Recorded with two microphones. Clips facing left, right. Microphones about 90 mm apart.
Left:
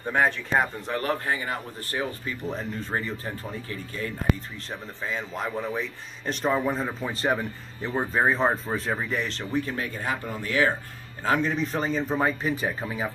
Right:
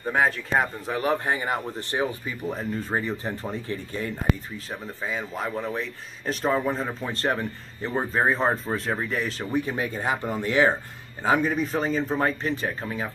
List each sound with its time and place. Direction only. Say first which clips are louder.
0.0 s speech: right 1 dB; centre (ahead or behind)
1.0 s speech: right 4 dB; 20° right (ahead or behind)
2.2 s speech: right 1 dB; 10° right (ahead or behind); by 4.0 s 30° right (ahead or behind)
4.6 s speech: right 1 dB; 5° right (ahead or behind); by 10.7 s 25° right (ahead or behind)
11.2 s speech: right 2 dB; 10° right (ahead or behind); by 13.1 s 5° left (ahead or behind)